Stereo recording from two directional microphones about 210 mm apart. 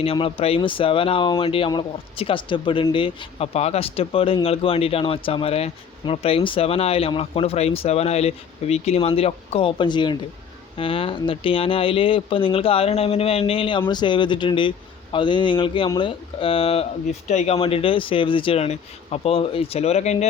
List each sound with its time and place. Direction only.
0.0 s speech: 25° left (ahead or behind)